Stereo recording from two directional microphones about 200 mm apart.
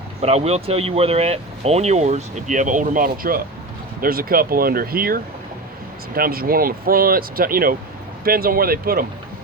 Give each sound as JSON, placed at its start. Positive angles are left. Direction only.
{"t": 0.2, "sound": "speech", "side_deg": -30}